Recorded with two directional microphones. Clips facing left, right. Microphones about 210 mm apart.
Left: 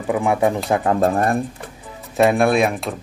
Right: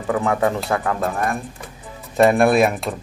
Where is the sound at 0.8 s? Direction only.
30° left (ahead or behind).